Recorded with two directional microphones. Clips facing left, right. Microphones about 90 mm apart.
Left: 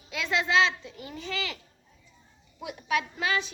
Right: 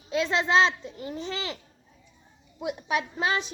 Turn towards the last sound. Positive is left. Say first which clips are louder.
# right 1 dB
turn(degrees=-30)  # may be behind; listen again after turning